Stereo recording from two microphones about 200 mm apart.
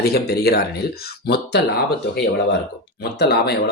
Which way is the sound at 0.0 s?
50° left (ahead or behind).